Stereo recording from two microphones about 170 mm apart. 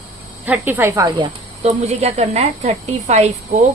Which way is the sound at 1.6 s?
40° right (ahead or behind).